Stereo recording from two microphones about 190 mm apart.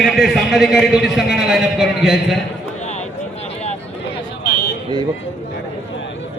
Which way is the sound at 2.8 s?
35° left (ahead or behind).